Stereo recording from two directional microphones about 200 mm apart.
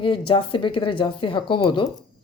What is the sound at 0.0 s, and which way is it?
Speech, 25° left (ahead or behind).